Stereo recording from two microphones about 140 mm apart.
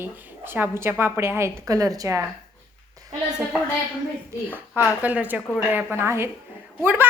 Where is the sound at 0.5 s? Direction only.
15° right (ahead or behind).